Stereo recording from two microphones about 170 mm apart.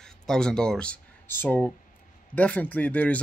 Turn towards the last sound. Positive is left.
turn(degrees=10)  # may be behind; listen again after turning